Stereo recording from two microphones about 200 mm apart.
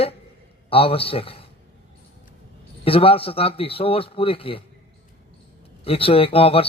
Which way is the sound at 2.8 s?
30° left (ahead or behind).